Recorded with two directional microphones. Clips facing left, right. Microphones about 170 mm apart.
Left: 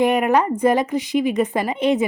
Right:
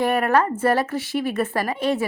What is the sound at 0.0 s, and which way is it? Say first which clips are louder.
A woman's voice: left 2 dB; 15° left (ahead or behind).